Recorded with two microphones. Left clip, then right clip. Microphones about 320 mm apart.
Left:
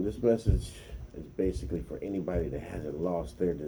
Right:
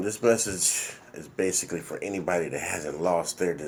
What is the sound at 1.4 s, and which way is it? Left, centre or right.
Speech, right.